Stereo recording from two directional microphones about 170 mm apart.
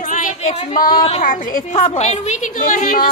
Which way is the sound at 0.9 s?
35° left (ahead or behind).